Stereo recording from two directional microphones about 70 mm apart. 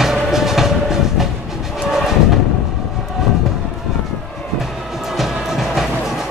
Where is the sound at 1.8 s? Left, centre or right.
Centre.